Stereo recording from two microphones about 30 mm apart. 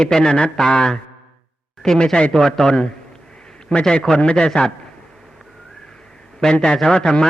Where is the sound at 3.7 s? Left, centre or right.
Left.